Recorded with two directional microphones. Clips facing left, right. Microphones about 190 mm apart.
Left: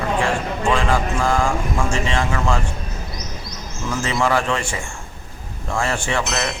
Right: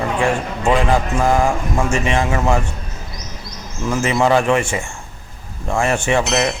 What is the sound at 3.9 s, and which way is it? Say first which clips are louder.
Speech: right 5 dB; 20° right (ahead or behind).